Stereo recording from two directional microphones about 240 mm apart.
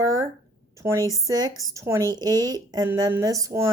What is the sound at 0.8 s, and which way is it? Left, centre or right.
Speech, centre.